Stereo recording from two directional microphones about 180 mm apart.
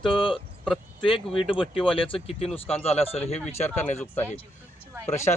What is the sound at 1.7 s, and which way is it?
Speech, 30° left (ahead or behind).